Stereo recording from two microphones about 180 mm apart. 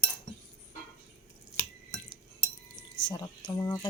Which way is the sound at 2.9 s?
25° left (ahead or behind).